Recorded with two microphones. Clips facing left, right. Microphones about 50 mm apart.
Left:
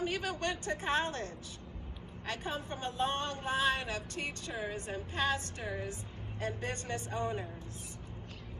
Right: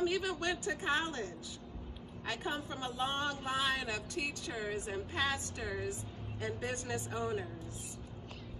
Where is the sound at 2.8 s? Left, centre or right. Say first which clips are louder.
Left 3 dB; left.